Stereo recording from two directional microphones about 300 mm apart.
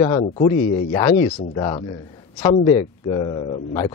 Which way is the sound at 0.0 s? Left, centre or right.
Centre.